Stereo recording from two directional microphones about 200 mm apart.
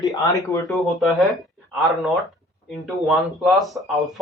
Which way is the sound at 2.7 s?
Centre (ahead or behind).